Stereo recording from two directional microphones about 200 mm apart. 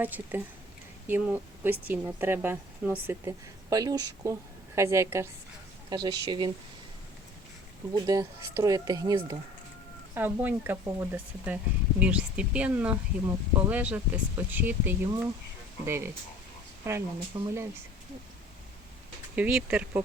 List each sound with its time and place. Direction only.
0.0 s speech: 10° right (ahead or behind)
7.9 s speech: 20° right (ahead or behind)
19.4 s speech: 5° right (ahead or behind)